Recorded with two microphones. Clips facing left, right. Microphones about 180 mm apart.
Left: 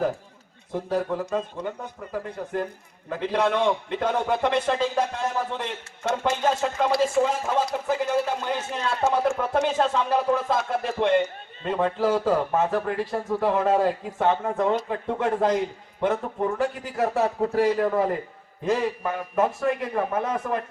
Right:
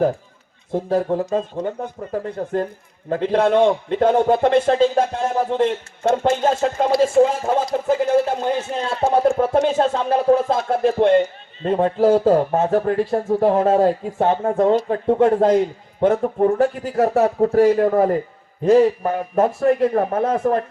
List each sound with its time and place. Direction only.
0.7 s a man's voice: 50° right (ahead or behind)